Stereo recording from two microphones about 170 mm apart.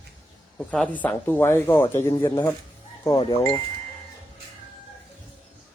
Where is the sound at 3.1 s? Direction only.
30° left (ahead or behind).